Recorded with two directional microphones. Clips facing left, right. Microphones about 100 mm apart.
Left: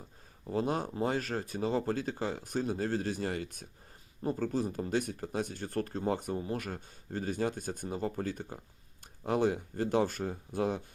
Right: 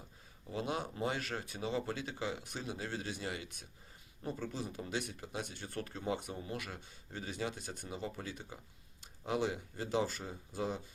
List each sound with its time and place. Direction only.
0.4 s speech: 40° left (ahead or behind); by 10.8 s 55° left (ahead or behind)